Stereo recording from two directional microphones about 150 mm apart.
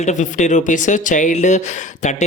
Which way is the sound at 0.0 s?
55° left (ahead or behind).